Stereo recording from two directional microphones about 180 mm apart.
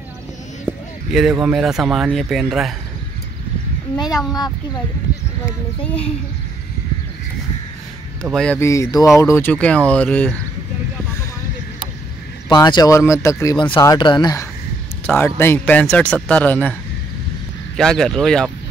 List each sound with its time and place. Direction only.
0.7 s speech: 5° right (ahead or behind)
3.9 s speech: 20° left (ahead or behind)
8.2 s speech: 5° left (ahead or behind)
8.5 s speech: 15° left (ahead or behind)
12.4 s speech: 25° left (ahead or behind); by 16.7 s 10° left (ahead or behind)
17.7 s speech: centre (ahead or behind)